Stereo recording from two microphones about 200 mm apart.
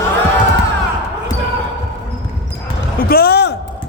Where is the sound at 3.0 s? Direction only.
50° left (ahead or behind).